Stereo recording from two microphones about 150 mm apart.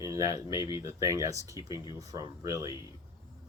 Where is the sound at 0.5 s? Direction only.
25° right (ahead or behind).